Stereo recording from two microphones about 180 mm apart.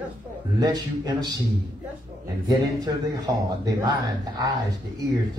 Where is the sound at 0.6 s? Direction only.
25° right (ahead or behind).